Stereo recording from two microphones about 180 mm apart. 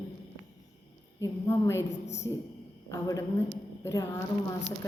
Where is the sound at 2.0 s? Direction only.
40° left (ahead or behind).